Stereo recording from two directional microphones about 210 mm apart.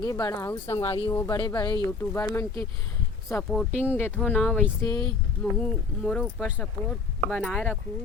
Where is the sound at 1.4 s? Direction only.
20° left (ahead or behind).